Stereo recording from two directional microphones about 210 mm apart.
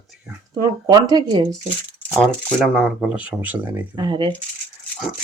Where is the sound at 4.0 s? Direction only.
20° right (ahead or behind).